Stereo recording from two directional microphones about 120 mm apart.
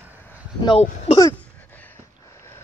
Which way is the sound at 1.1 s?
65° left (ahead or behind).